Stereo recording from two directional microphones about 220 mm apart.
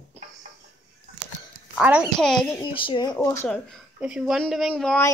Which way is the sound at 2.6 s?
25° left (ahead or behind).